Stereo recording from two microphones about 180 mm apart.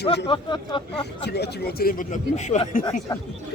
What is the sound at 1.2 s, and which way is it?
Speech, 65° left (ahead or behind).